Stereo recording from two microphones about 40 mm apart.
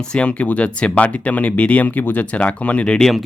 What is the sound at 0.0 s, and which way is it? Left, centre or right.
Speech, left.